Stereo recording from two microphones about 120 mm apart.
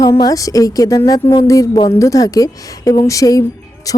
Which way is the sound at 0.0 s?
30° left (ahead or behind).